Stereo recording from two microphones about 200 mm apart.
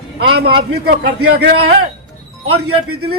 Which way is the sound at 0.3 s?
55° right (ahead or behind).